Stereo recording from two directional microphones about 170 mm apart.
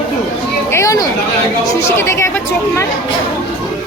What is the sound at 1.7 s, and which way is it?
Speech, 15° left (ahead or behind).